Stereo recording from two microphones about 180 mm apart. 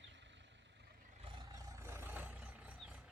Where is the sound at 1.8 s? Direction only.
15° right (ahead or behind).